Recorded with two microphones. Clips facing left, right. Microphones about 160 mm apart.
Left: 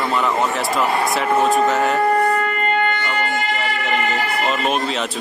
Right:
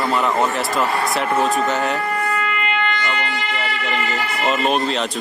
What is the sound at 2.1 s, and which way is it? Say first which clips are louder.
Shofar: left 5 dB; 35° left (ahead or behind).